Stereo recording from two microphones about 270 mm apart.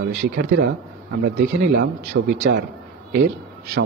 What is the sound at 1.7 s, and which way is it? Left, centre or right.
A man's voice, right.